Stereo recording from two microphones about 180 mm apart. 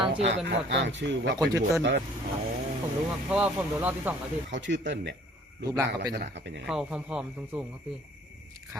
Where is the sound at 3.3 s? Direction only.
5° right (ahead or behind).